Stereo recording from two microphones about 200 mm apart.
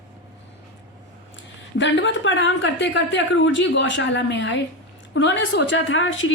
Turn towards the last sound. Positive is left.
turn(degrees=70)  # may be behind; listen again after turning